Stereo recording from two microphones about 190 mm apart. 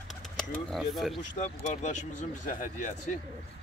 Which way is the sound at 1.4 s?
35° left (ahead or behind).